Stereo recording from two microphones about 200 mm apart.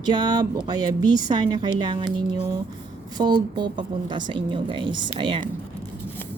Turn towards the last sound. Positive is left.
turn(degrees=-25)  # may be behind; listen again after turning